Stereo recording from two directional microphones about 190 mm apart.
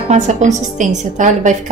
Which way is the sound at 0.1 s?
40° right (ahead or behind).